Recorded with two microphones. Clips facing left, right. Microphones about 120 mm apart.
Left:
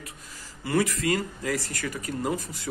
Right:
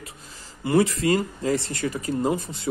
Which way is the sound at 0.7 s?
25° right (ahead or behind).